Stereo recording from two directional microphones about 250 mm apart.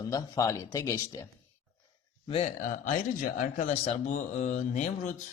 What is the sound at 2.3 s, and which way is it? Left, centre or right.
Speech, left.